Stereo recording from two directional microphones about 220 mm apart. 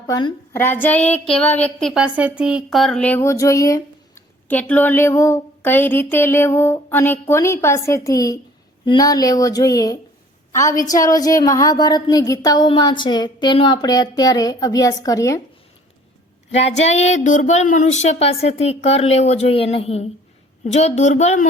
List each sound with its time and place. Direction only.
0.1 s speech: 20° left (ahead or behind)
0.5 s a woman's voice: 10° left (ahead or behind)
16.5 s a woman's voice: 30° left (ahead or behind)